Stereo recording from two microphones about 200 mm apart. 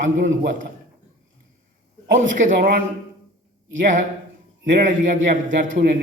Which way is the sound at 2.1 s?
40° right (ahead or behind).